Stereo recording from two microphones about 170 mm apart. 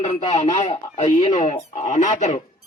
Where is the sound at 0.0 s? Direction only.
45° left (ahead or behind).